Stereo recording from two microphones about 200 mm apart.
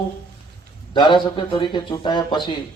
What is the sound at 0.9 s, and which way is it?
A man's voice, 25° left (ahead or behind).